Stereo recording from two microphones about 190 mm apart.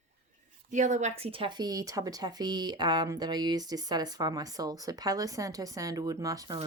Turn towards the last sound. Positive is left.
turn(degrees=-20)  # may be behind; listen again after turning